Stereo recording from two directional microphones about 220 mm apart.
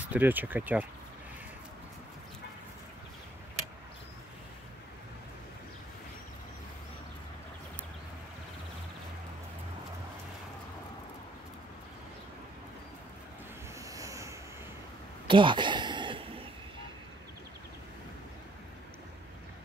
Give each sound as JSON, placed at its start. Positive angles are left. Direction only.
{"t": 0.0, "sound": "speech", "side_deg": -5}
{"t": 13.8, "sound": "vehicle", "side_deg": -15}
{"t": 15.2, "sound": "a sound", "side_deg": -20}